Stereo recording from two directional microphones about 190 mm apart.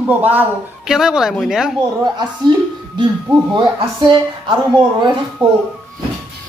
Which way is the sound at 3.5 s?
25° right (ahead or behind).